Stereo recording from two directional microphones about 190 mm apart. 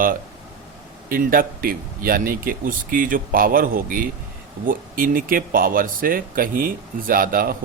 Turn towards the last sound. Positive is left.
turn(degrees=-50)  # may be behind; listen again after turning